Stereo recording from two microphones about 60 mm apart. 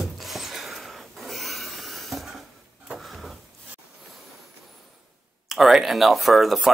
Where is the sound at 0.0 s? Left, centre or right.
Centre.